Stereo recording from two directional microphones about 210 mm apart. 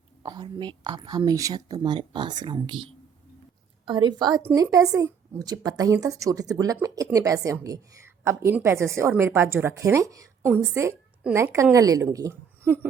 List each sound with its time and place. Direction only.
0.2 s speech: 20° right (ahead or behind)
3.8 s speech: 20° right (ahead or behind)
12.6 s a sound: 10° right (ahead or behind)